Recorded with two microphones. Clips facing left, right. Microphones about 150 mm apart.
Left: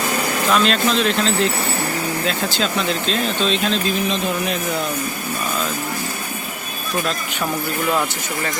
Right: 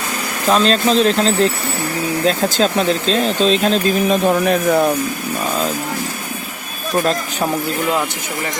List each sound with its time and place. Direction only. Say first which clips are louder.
0.5 s speech: right 5 dB; 35° right (ahead or behind); by 4.9 s 55° right (ahead or behind)